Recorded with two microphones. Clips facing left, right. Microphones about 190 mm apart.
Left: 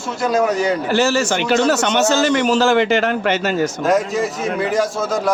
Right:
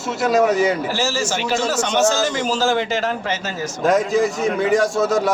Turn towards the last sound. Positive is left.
turn(degrees=0)  # may be behind; listen again after turning